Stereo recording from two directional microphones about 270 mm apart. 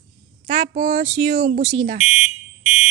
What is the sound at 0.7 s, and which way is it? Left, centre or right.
Speech, right.